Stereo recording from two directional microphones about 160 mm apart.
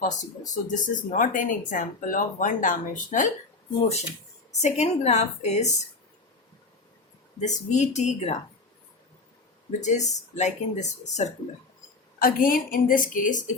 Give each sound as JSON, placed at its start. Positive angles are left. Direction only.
{"t": 0.0, "sound": "speech", "side_deg": 50}
{"t": 4.6, "sound": "speech", "side_deg": 45}
{"t": 7.3, "sound": "speech", "side_deg": 45}
{"t": 9.8, "sound": "speech", "side_deg": 45}
{"t": 12.2, "sound": "a woman's voice", "side_deg": 60}